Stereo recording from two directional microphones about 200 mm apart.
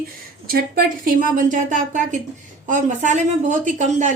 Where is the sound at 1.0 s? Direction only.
40° right (ahead or behind).